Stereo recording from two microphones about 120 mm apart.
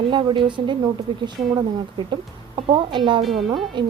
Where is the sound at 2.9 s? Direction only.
40° right (ahead or behind).